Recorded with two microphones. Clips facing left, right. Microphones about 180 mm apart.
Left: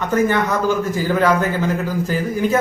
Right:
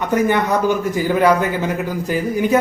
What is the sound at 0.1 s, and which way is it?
Speech, 15° right (ahead or behind).